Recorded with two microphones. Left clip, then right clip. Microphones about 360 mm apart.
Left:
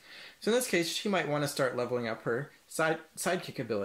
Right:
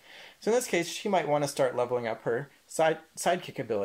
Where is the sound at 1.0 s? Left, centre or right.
Centre.